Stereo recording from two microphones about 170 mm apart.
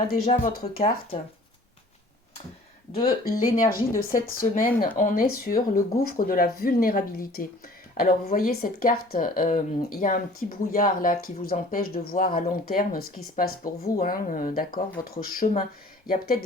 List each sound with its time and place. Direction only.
0.6 s speech: 35° left (ahead or behind)
2.9 s speech: 30° left (ahead or behind)
3.2 s speech: 55° left (ahead or behind)